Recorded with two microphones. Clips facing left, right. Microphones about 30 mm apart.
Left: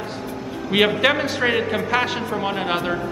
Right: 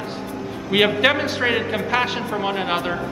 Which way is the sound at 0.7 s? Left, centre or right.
Centre.